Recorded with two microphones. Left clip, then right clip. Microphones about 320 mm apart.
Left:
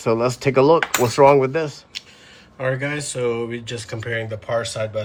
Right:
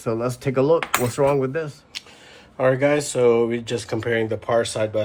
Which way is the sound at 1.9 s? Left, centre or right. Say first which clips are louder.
Left 1 dB; centre.